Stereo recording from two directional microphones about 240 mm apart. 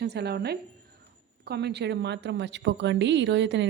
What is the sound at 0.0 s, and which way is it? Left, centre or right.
A woman's voice, right.